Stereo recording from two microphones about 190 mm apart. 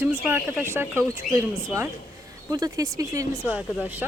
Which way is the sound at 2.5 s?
20° right (ahead or behind).